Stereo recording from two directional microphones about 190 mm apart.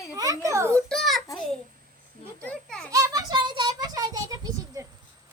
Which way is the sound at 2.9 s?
20° right (ahead or behind).